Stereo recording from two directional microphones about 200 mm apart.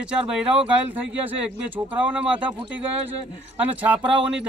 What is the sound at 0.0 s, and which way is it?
A man's voice, 5° right (ahead or behind).